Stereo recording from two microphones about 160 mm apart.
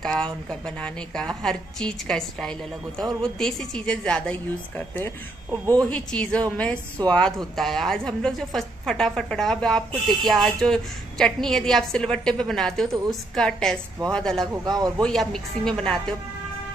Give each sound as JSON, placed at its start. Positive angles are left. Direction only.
{"t": 0.0, "sound": "a woman's voice", "side_deg": 5}
{"t": 14.6, "sound": "speech", "side_deg": -25}
{"t": 15.0, "sound": "a woman's voice", "side_deg": 5}